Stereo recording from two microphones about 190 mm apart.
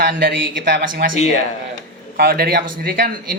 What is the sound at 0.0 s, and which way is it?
Speech, 55° right (ahead or behind).